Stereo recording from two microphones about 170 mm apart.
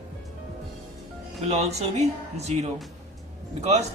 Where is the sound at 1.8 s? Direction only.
40° right (ahead or behind).